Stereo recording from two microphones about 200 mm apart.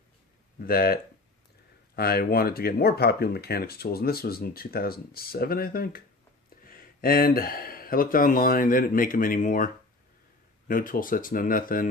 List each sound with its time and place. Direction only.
0.6 s speech: 45° left (ahead or behind)
2.0 s speech: 50° left (ahead or behind)
10.7 s speech: 45° left (ahead or behind)